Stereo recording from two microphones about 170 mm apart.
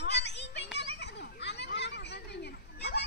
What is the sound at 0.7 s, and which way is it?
Children playing, 90° left.